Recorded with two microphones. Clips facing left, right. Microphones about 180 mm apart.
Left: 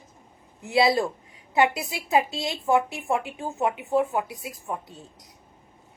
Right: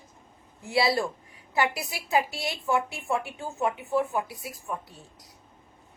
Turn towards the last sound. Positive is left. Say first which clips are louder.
# left 4 dB
turn(degrees=20)  # may be behind; listen again after turning